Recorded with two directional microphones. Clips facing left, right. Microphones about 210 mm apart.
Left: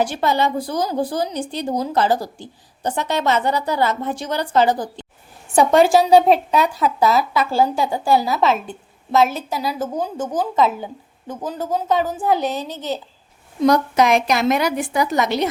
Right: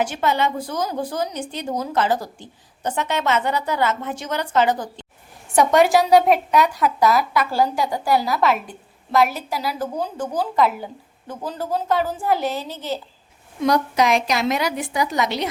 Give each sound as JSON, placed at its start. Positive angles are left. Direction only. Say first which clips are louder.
{"t": 0.0, "sound": "a woman's voice", "louder": "left 2 dB", "side_deg": 35}
{"t": 13.6, "sound": "a woman's voice", "louder": "left 3 dB", "side_deg": 50}